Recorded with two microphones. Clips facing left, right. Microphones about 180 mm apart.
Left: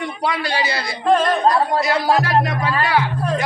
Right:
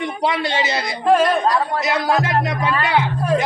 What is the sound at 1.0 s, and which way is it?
Music, 10° right (ahead or behind).